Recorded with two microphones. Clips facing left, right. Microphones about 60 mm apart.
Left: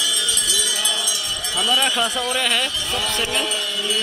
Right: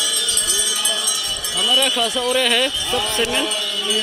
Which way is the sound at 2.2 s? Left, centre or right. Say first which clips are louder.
Right 4 dB; centre.